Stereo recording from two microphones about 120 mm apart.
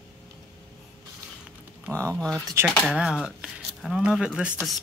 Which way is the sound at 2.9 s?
5° right (ahead or behind).